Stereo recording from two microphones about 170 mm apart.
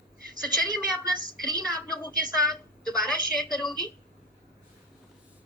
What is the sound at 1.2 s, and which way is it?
Speech, 25° right (ahead or behind).